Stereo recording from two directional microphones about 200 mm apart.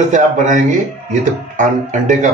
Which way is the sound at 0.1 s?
40° right (ahead or behind).